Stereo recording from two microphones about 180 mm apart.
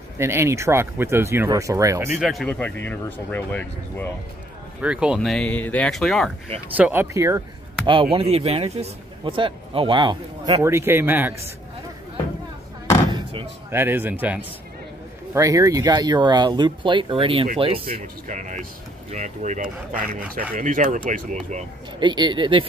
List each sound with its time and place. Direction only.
0.2 s speech: 15° right (ahead or behind)
2.1 s speech: centre (ahead or behind)
4.8 s speech: 5° right (ahead or behind)
6.8 s speech: 10° right (ahead or behind)
13.1 s slam: 30° right (ahead or behind)
13.7 s speech: 10° right (ahead or behind); by 21.6 s 40° right (ahead or behind)
22.0 s speech: 25° right (ahead or behind)